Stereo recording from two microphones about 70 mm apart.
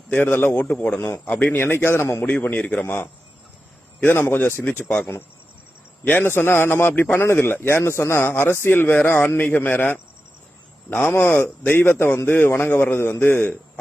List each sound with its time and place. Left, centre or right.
0.1 s a man's voice: left
2.2 s speech: left
4.0 s a man's voice: left
6.1 s a man's voice: left